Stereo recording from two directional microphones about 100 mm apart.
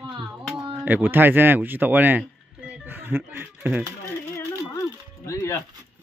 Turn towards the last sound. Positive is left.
turn(degrees=30)  # may be behind; listen again after turning